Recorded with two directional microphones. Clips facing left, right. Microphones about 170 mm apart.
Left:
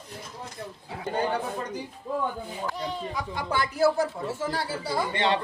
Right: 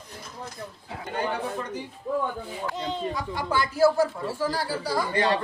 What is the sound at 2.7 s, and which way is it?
Speech, 20° right (ahead or behind).